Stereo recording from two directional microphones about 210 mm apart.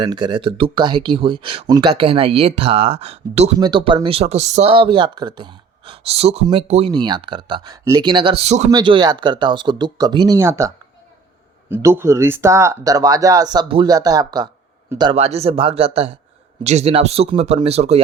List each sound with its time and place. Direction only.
0.0 s speech: 20° right (ahead or behind)
8.7 s speech: 20° right (ahead or behind)
11.7 s speech: 10° right (ahead or behind); by 18.0 s 30° right (ahead or behind)